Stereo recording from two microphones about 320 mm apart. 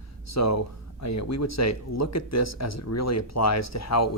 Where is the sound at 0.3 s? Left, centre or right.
Left.